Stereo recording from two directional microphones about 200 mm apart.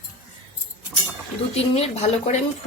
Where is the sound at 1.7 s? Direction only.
30° left (ahead or behind).